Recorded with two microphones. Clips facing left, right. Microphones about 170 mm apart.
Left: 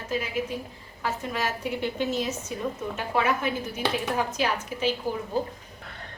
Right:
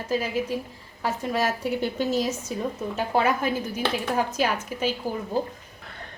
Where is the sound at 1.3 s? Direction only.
40° right (ahead or behind).